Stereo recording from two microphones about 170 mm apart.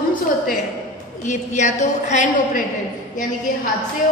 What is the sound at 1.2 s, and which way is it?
A woman's voice, 45° left (ahead or behind).